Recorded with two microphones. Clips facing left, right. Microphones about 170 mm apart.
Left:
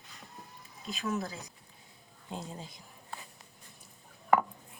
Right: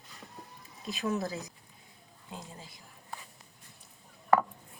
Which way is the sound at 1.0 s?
30° right (ahead or behind).